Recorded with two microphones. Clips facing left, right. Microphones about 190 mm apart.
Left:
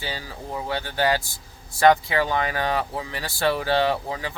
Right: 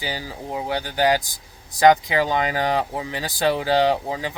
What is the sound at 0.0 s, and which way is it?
Speech, 15° right (ahead or behind).